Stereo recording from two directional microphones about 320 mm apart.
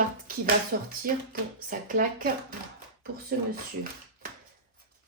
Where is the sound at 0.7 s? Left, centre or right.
Right.